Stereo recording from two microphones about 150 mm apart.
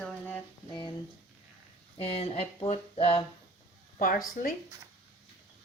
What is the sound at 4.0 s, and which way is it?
Speech, 65° left (ahead or behind).